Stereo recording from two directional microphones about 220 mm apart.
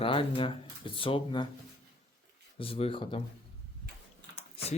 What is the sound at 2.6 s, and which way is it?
Speech, 25° left (ahead or behind).